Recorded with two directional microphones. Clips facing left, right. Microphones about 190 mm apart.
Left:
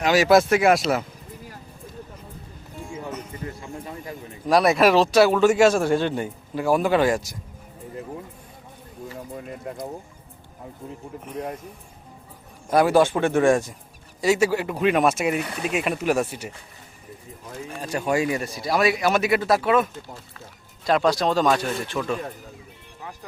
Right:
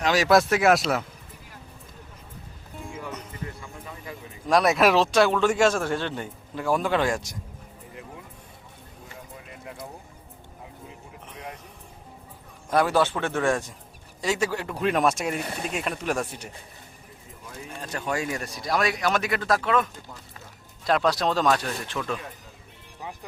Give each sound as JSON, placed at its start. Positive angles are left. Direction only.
{"t": 0.0, "sound": "speech", "side_deg": 5}
{"t": 3.6, "sound": "speech", "side_deg": 35}
{"t": 4.4, "sound": "speech", "side_deg": 0}
{"t": 9.3, "sound": "a sound", "side_deg": 45}
{"t": 12.7, "sound": "speech", "side_deg": 10}
{"t": 17.7, "sound": "speech", "side_deg": 10}